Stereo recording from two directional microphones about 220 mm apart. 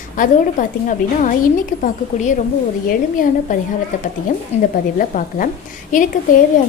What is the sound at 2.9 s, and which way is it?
Speech, 40° left (ahead or behind).